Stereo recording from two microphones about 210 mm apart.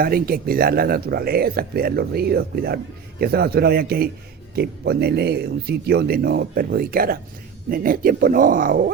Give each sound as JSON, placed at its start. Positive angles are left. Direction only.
{"t": 0.0, "sound": "speech", "side_deg": -45}